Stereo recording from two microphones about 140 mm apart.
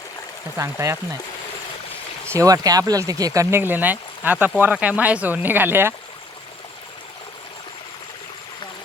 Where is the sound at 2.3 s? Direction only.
25° right (ahead or behind).